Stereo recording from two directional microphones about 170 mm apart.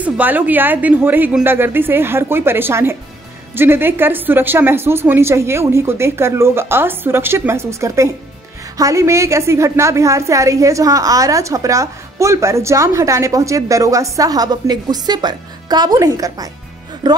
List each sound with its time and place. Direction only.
0.0 s a woman's voice: 10° right (ahead or behind); by 17.2 s 25° right (ahead or behind)